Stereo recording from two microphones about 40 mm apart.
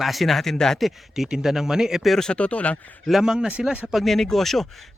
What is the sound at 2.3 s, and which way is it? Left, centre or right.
Speech, left.